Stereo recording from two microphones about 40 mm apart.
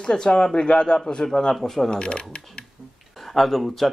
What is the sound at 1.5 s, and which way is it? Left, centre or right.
Speech, centre.